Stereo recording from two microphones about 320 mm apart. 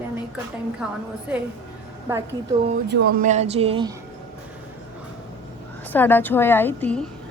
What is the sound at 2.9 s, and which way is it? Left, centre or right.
Speech, right.